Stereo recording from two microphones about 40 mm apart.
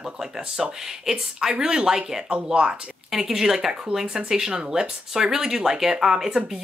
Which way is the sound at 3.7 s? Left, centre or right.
Right.